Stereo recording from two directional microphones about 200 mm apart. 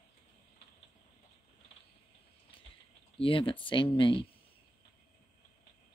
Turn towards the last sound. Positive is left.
turn(degrees=25)  # may be behind; listen again after turning